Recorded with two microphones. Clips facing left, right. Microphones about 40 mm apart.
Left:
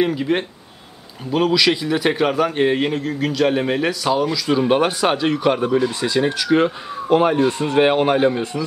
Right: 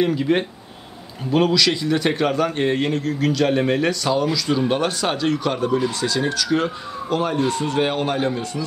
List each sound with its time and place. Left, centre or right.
0.0 s a man's voice: centre
1.5 s a man's voice: centre